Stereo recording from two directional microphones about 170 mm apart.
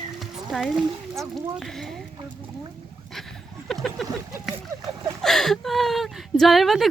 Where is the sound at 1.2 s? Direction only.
Centre (ahead or behind).